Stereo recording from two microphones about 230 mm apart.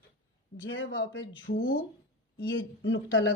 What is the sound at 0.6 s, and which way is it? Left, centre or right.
Speech, left.